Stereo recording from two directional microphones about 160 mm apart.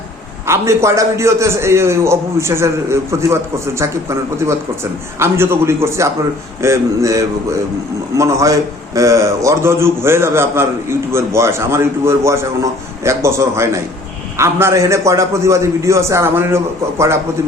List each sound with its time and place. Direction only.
0.4 s a man's voice: 15° right (ahead or behind)